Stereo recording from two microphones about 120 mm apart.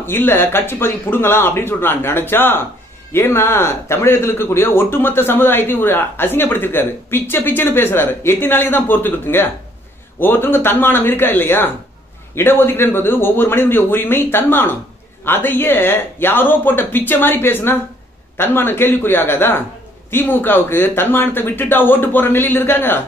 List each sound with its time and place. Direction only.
0.0 s speech: 20° left (ahead or behind)